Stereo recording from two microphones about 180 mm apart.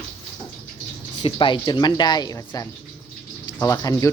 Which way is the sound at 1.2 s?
25° left (ahead or behind).